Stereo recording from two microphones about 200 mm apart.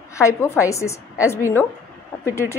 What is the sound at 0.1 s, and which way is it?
A woman's voice, 15° left (ahead or behind).